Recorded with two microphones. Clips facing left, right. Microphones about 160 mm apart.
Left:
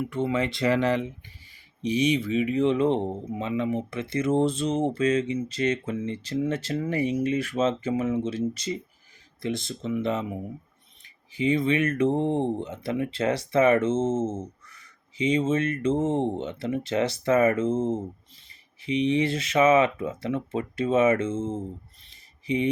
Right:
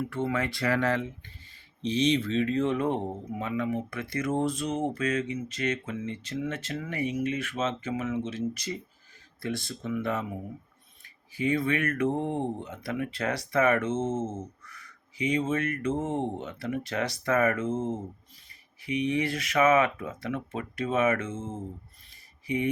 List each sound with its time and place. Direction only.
0.0 s speech: 20° left (ahead or behind)
11.3 s speech: 20° left (ahead or behind)
22.1 s a sound: 20° left (ahead or behind)